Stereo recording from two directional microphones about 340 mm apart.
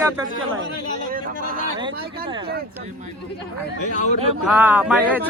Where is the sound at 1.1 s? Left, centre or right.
Right.